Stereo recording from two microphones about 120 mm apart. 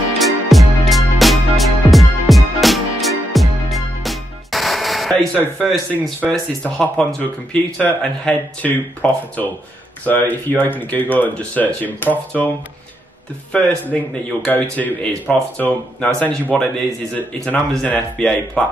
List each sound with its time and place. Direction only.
0.2 s music: centre (ahead or behind)
5.6 s speech: centre (ahead or behind)
13.5 s speech: 10° left (ahead or behind)